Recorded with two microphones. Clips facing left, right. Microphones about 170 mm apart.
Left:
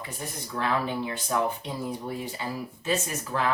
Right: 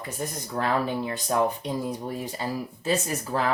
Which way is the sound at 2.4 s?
40° right (ahead or behind).